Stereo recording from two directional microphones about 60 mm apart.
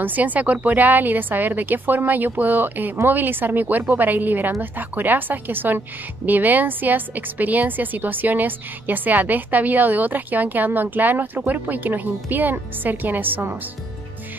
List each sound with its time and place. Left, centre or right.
0.0 s a woman's voice: right